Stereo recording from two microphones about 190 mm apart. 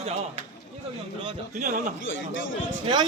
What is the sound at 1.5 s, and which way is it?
Speech, 40° right (ahead or behind).